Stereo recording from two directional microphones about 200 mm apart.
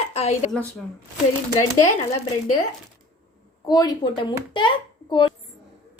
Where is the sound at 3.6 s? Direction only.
20° left (ahead or behind).